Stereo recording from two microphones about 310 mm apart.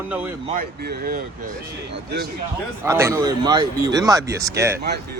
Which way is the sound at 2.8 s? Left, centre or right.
Centre.